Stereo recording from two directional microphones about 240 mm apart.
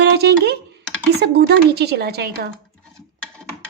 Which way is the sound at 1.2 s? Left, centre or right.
Right.